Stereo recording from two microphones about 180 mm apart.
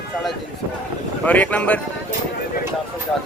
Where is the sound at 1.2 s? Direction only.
10° left (ahead or behind).